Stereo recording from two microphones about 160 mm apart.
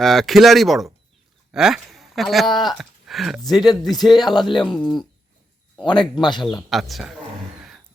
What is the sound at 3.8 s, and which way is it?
A man's voice, centre (ahead or behind).